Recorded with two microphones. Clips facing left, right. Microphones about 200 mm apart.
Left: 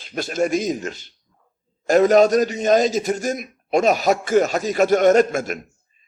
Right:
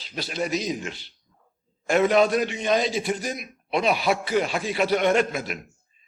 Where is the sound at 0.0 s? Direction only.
50° left (ahead or behind).